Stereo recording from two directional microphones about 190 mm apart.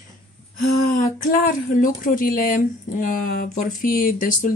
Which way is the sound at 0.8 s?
45° left (ahead or behind).